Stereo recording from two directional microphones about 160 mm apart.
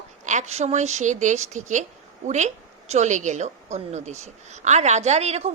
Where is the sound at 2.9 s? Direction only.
45° right (ahead or behind).